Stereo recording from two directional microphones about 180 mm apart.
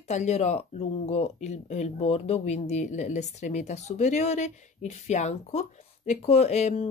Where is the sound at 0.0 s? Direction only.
40° left (ahead or behind).